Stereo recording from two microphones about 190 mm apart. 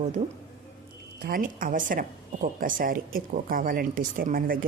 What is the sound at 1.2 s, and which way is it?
A woman's voice, 50° right (ahead or behind).